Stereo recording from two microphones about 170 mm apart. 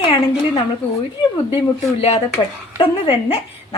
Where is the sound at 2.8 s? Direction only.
35° left (ahead or behind).